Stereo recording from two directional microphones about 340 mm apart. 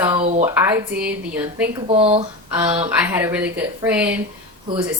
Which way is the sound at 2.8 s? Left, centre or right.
Centre.